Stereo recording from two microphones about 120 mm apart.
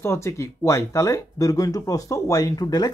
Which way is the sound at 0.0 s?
20° left (ahead or behind).